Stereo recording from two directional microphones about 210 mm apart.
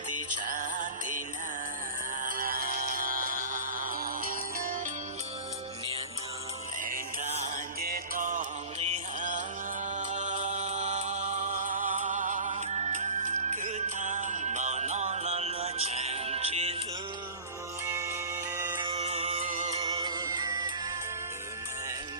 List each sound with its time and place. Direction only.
0.6 s music: 40° right (ahead or behind)
2.2 s music: 40° right (ahead or behind)
7.5 s music: 45° right (ahead or behind)
9.9 s music: 35° right (ahead or behind)
17.8 s music: 15° right (ahead or behind)
18.8 s music: 25° right (ahead or behind)
19.7 s music: 20° right (ahead or behind)